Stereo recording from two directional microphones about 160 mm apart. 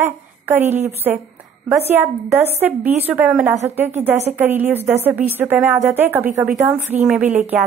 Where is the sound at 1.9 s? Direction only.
15° right (ahead or behind).